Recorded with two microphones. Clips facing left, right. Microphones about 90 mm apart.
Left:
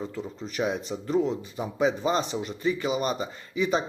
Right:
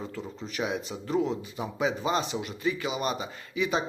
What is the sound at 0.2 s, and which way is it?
Speech, centre (ahead or behind).